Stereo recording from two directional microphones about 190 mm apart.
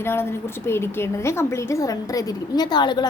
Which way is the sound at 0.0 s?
10° left (ahead or behind).